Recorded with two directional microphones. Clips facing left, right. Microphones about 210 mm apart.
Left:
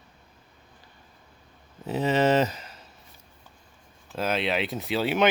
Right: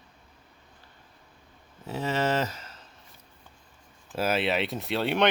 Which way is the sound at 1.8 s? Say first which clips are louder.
Left 5 dB; 20° left (ahead or behind).